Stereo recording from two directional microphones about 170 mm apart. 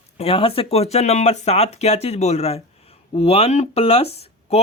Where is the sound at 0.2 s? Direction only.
35° left (ahead or behind).